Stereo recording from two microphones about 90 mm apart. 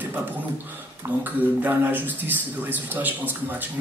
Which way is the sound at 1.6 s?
20° right (ahead or behind).